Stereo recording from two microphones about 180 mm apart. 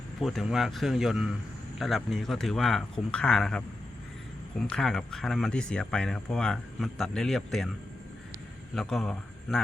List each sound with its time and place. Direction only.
0.2 s speech: centre (ahead or behind)
4.6 s speech: 5° left (ahead or behind)
8.7 s a man's voice: centre (ahead or behind)